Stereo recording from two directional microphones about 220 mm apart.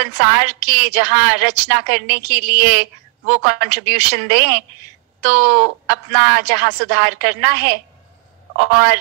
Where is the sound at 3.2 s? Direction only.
50° right (ahead or behind).